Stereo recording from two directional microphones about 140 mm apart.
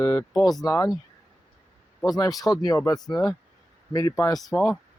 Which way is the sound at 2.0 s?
25° left (ahead or behind).